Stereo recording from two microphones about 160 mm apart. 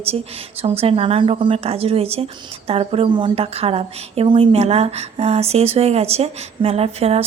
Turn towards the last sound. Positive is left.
turn(degrees=-40)  # may be behind; listen again after turning